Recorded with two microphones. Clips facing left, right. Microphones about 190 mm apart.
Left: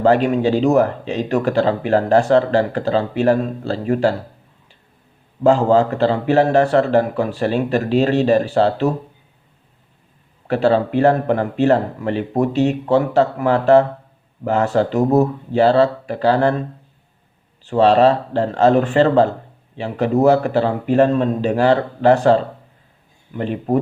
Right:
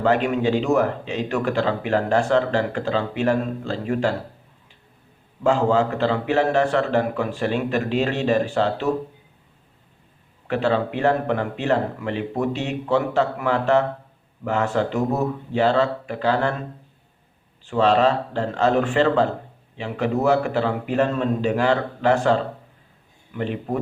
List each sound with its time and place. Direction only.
0.0 s speech: 35° left (ahead or behind)
5.4 s speech: 40° left (ahead or behind)
10.5 s speech: 40° left (ahead or behind)
17.7 s speech: 35° left (ahead or behind)
23.4 s speech: 40° left (ahead or behind)